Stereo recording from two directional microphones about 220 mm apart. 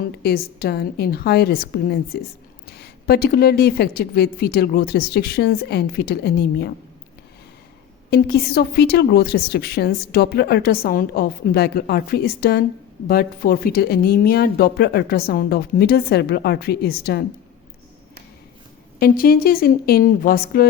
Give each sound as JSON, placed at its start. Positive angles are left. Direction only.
{"t": 0.2, "sound": "a woman's voice", "side_deg": 45}
{"t": 8.1, "sound": "a woman's voice", "side_deg": 45}
{"t": 18.9, "sound": "a woman's voice", "side_deg": 40}